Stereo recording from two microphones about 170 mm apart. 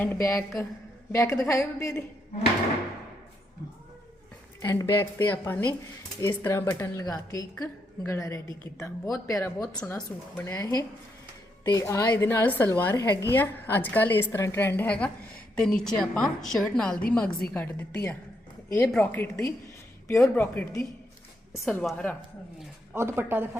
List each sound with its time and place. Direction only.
0.0 s a woman's voice: 15° left (ahead or behind)
4.6 s a woman's voice: 15° left (ahead or behind)
22.9 s speech: 15° right (ahead or behind)